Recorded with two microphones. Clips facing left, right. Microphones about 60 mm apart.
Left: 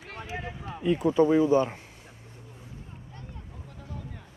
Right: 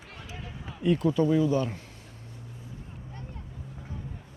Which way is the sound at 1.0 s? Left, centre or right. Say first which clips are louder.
Left 4 dB; left.